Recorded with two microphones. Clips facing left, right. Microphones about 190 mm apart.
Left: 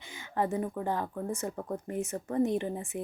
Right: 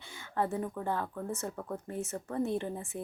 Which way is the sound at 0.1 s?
15° left (ahead or behind).